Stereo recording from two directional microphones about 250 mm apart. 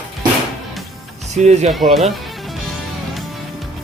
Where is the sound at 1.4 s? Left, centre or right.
Right.